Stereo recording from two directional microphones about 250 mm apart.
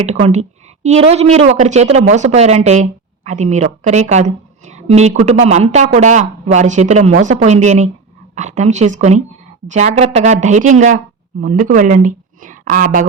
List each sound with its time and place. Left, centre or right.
0.0 s a woman's voice: right